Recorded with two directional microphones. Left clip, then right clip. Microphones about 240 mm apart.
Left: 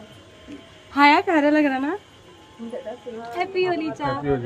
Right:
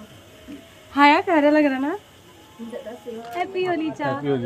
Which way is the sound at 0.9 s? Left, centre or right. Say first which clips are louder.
Even; centre.